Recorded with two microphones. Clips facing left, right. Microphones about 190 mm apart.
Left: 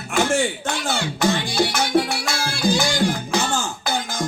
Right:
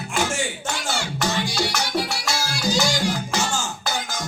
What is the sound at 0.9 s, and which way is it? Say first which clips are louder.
Music: left 4 dB; 55° left (ahead or behind).